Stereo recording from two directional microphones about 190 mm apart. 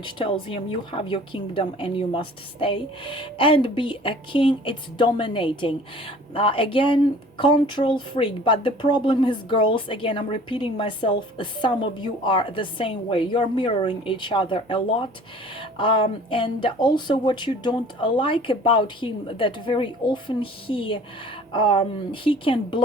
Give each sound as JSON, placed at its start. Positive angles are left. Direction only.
{"t": 0.0, "sound": "speech", "side_deg": 25}